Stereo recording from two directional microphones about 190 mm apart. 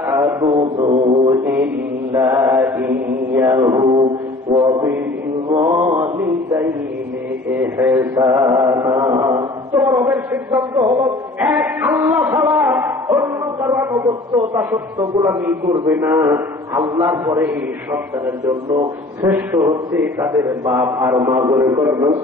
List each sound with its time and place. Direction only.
0.1 s a man's voice: 15° right (ahead or behind)
1.4 s a man's voice: 10° right (ahead or behind)
3.9 s mantra: 25° right (ahead or behind)
5.5 s a man's voice: 15° right (ahead or behind)
8.3 s chant: 20° right (ahead or behind)
15.9 s a man's voice: 10° right (ahead or behind)